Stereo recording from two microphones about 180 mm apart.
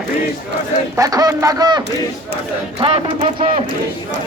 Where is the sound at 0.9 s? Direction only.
20° right (ahead or behind).